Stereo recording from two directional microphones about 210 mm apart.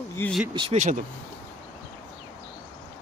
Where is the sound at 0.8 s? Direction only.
35° right (ahead or behind).